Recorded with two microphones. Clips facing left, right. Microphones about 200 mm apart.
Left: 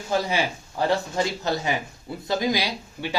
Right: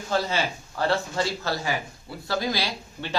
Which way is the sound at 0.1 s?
15° left (ahead or behind).